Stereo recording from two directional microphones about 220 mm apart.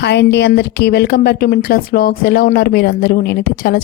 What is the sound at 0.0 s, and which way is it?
Speech, 50° left (ahead or behind).